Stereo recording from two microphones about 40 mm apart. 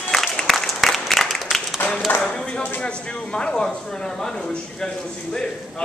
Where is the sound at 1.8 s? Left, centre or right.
Left.